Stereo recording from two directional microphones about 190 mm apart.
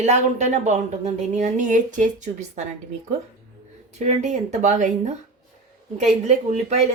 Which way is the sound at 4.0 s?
35° right (ahead or behind).